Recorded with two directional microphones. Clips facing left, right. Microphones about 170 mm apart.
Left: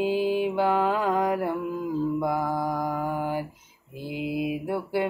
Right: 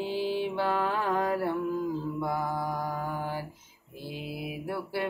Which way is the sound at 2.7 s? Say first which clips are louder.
Left 5 dB; 15° left (ahead or behind).